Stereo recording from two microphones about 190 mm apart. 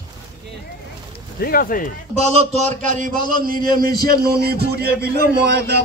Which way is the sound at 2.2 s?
35° right (ahead or behind).